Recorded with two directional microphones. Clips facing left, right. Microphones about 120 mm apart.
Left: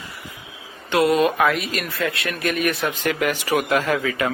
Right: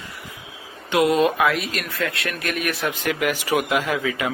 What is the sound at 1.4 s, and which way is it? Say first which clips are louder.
Speech: left 1 dB; centre (ahead or behind).